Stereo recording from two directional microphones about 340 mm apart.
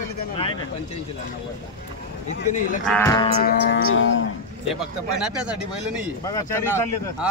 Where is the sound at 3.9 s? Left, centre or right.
Left.